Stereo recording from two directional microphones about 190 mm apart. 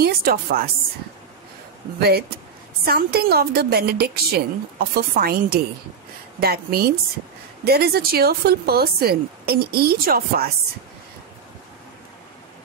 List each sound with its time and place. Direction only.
0.0 s a woman's voice: 50° right (ahead or behind)
2.0 s a woman's voice: 55° right (ahead or behind)